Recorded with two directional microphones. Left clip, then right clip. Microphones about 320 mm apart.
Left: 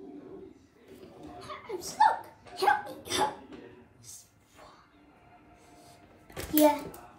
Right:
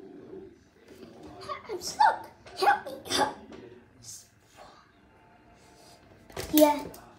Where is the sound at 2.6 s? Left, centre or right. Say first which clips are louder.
Right 2 dB; centre.